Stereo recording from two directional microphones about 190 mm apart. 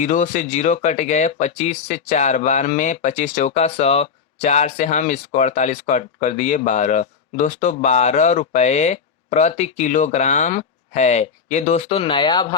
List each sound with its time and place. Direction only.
0.0 s speech: 40° left (ahead or behind); by 12.5 s 25° left (ahead or behind)